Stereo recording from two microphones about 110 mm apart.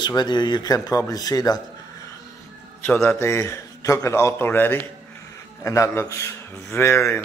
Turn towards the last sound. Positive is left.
turn(degrees=25)  # may be behind; listen again after turning